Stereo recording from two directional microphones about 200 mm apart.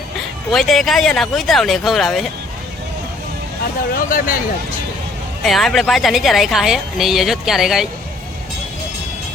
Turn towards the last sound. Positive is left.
turn(degrees=0)  # may be behind; listen again after turning